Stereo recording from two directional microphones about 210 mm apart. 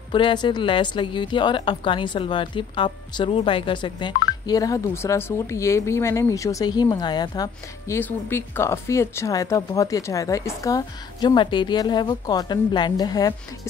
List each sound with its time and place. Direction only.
0.1 s a woman's voice: 20° left (ahead or behind)